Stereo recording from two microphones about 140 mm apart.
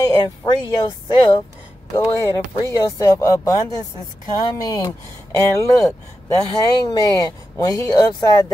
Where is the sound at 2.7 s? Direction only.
25° left (ahead or behind).